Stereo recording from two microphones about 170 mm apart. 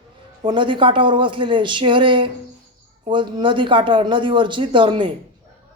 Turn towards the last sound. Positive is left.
turn(degrees=-30)  # may be behind; listen again after turning